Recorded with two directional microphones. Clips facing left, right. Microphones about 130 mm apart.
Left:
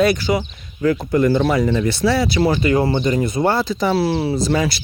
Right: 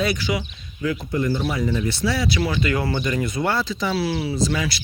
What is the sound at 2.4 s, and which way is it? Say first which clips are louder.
Speech: left 6 dB; 30° left (ahead or behind).